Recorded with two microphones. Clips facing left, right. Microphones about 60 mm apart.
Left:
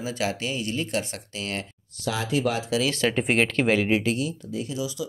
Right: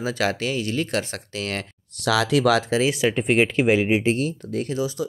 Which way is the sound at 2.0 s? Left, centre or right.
Right.